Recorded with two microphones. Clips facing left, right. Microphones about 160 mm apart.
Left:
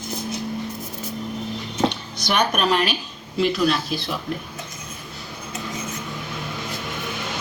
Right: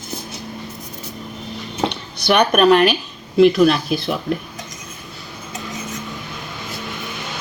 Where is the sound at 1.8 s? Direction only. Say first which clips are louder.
Right 4 dB; 65° right (ahead or behind).